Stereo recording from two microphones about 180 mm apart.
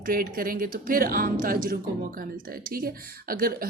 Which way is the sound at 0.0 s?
55° right (ahead or behind).